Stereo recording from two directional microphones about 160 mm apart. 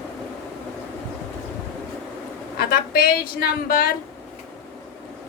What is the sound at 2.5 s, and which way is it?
A woman's voice, 70° left (ahead or behind).